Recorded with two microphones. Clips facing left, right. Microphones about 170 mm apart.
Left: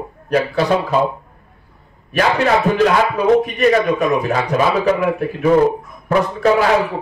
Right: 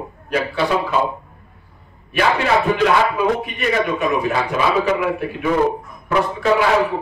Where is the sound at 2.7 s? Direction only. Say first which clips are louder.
Left 2 dB; 40° left (ahead or behind).